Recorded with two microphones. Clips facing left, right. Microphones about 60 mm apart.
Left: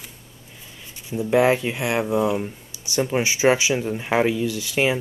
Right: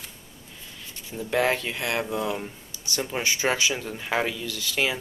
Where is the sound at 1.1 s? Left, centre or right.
Centre.